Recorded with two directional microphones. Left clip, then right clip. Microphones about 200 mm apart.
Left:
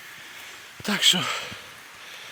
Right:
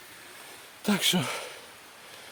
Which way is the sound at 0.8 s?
35° right (ahead or behind).